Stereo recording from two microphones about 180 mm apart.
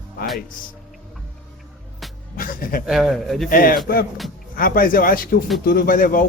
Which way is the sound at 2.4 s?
50° left (ahead or behind).